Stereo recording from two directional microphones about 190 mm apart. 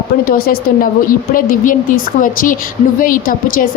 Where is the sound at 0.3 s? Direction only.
50° left (ahead or behind).